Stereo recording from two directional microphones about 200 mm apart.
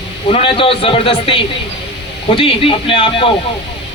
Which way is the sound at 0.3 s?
30° left (ahead or behind).